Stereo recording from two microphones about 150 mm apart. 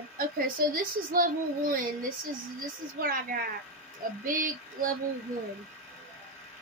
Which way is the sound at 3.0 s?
70° right (ahead or behind).